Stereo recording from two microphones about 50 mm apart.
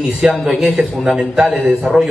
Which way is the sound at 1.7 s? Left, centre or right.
Centre.